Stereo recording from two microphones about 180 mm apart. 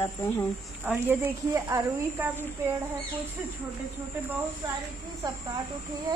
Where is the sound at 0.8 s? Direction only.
10° right (ahead or behind).